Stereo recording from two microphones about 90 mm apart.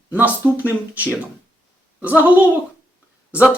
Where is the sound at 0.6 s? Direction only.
15° right (ahead or behind).